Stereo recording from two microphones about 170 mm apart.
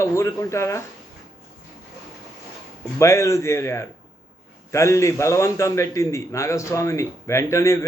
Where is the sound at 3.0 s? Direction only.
15° left (ahead or behind).